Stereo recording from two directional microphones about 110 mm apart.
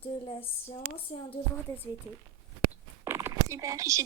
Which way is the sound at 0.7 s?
60° left (ahead or behind).